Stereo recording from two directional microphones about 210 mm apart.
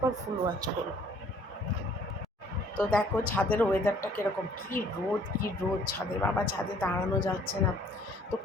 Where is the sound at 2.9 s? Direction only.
5° left (ahead or behind).